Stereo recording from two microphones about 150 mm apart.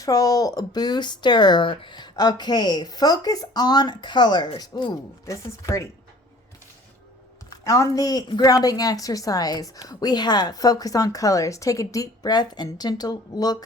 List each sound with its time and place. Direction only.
0.0 s a woman's voice: 25° left (ahead or behind)
7.6 s a woman's voice: 20° left (ahead or behind)